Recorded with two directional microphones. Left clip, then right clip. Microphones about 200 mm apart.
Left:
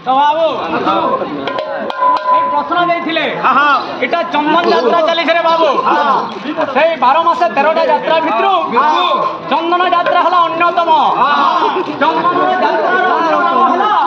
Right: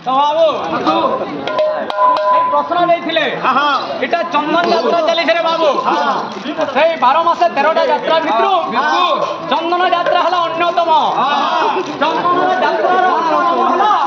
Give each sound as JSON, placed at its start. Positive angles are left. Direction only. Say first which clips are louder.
{"t": 0.1, "sound": "speech", "louder": "left 1 dB", "side_deg": -10}
{"t": 3.4, "sound": "a man's voice", "louder": "left 5 dB", "side_deg": 25}
{"t": 4.1, "sound": "a man's voice", "louder": "left 2 dB", "side_deg": 10}
{"t": 6.8, "sound": "a man's voice", "louder": "left 1 dB", "side_deg": 20}
{"t": 8.7, "sound": "a man's voice", "louder": "left 3 dB", "side_deg": -20}
{"t": 9.5, "sound": "a man's voice", "louder": "left 1 dB", "side_deg": 20}